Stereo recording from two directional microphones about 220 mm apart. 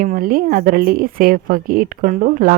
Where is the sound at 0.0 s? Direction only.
40° right (ahead or behind).